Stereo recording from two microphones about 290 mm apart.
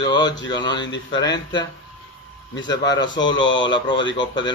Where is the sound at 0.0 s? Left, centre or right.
Centre.